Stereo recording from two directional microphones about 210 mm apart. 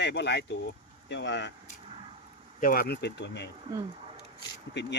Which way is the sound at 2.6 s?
45° left (ahead or behind).